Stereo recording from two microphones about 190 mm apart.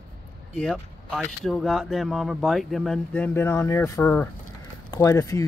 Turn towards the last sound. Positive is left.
turn(degrees=15)  # may be behind; listen again after turning